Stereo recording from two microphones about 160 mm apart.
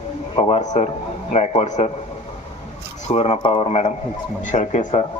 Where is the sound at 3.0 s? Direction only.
40° left (ahead or behind).